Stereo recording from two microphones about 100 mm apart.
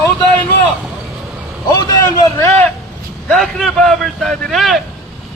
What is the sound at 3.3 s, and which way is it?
Speech, 5° left (ahead or behind).